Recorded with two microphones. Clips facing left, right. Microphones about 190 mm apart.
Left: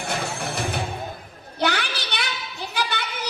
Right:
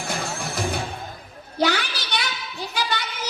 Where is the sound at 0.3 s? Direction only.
60° left (ahead or behind).